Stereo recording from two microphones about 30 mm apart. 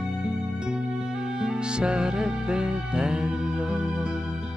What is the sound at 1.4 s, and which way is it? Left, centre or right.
Music, right.